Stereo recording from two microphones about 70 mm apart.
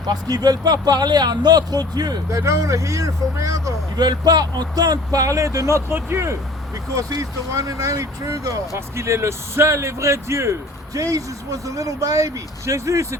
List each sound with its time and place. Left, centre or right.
0.1 s speech: right
2.4 s speech: right
3.9 s speech: right
6.9 s speech: right
9.0 s speech: right
10.9 s speech: right